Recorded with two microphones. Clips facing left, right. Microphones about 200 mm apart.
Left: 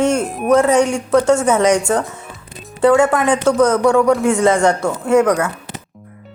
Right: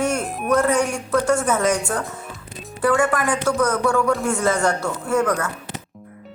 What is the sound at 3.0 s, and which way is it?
Speech, 25° left (ahead or behind).